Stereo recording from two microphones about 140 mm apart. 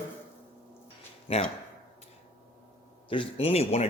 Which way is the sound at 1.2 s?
40° left (ahead or behind).